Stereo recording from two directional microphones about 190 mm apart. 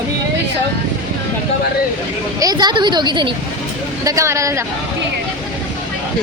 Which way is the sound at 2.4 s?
20° right (ahead or behind).